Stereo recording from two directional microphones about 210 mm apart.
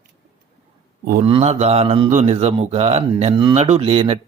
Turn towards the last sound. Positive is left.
turn(degrees=-25)  # may be behind; listen again after turning